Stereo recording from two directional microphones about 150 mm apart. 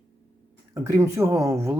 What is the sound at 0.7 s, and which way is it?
Speech, 20° right (ahead or behind).